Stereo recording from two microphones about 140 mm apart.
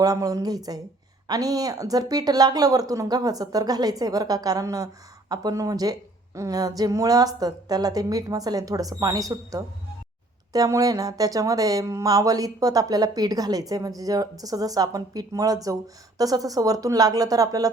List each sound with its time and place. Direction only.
0.0 s speech: 25° right (ahead or behind)